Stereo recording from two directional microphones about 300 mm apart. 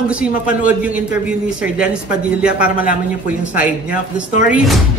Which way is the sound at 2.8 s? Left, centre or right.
Left.